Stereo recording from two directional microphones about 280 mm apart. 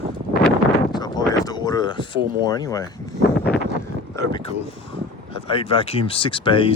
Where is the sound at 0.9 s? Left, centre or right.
Centre.